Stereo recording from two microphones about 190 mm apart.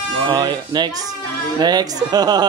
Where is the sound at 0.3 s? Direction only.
20° right (ahead or behind).